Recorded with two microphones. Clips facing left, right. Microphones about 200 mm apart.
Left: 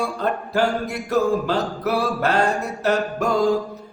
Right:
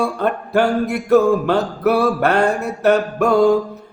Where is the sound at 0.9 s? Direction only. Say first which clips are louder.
Right 7 dB; 60° right (ahead or behind).